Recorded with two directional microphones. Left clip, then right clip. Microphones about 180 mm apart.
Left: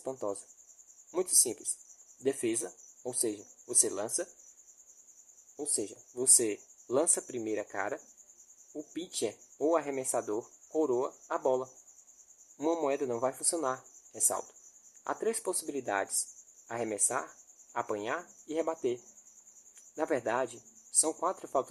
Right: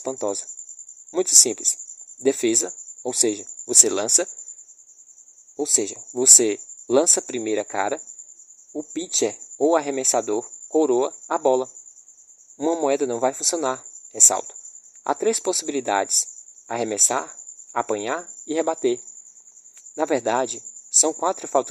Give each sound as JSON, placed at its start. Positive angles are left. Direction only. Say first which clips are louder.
{"t": 0.0, "sound": "speech", "louder": "right 10 dB", "side_deg": -35}
{"t": 5.5, "sound": "speech", "louder": "right 13 dB", "side_deg": -40}
{"t": 12.5, "sound": "speech", "louder": "right 9 dB", "side_deg": -30}
{"t": 20.0, "sound": "speech", "louder": "right 10 dB", "side_deg": -40}